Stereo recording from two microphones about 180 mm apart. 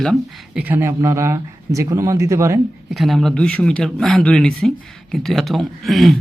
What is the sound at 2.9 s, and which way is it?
Speech, centre (ahead or behind).